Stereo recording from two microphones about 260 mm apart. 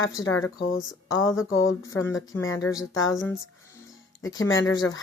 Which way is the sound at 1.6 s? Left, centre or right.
Centre.